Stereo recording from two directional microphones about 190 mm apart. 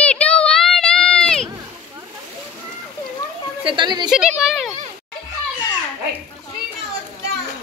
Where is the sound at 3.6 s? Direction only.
25° right (ahead or behind).